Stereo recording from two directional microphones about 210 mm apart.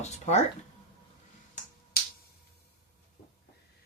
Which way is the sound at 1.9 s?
45° left (ahead or behind).